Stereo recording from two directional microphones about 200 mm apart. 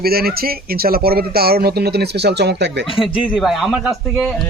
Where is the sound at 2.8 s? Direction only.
25° left (ahead or behind).